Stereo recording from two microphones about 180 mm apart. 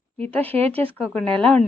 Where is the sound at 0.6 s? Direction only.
35° right (ahead or behind).